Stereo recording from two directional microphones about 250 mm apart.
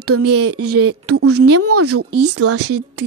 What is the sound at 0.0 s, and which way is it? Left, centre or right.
A woman's voice, right.